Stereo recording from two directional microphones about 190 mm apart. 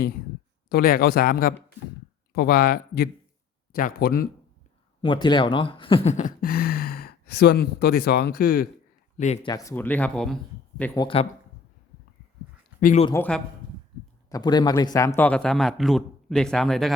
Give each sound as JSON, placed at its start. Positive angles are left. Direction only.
{"t": 0.7, "sound": "speech", "side_deg": 50}
{"t": 5.0, "sound": "speech", "side_deg": 25}
{"t": 9.1, "sound": "speech", "side_deg": 40}
{"t": 9.4, "sound": "speech", "side_deg": 20}
{"t": 10.9, "sound": "speech", "side_deg": 25}
{"t": 12.8, "sound": "speech", "side_deg": 40}
{"t": 13.1, "sound": "speech", "side_deg": 5}
{"t": 14.3, "sound": "a man's voice", "side_deg": 20}